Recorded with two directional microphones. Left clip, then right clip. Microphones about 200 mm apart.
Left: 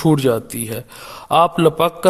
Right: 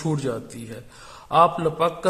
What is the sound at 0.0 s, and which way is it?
A man's voice, 40° left (ahead or behind).